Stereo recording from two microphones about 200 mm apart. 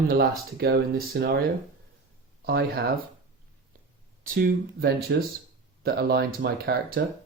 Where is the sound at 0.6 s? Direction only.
50° right (ahead or behind).